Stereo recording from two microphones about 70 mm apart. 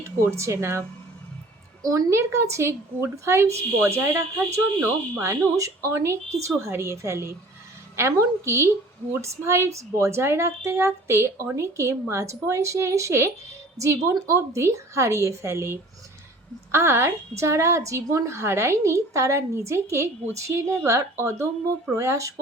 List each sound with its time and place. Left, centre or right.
0.0 s a woman's voice: right
1.8 s a woman's voice: right